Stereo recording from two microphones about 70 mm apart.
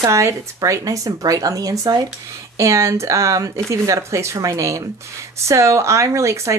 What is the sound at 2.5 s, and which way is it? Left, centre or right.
Speech, right.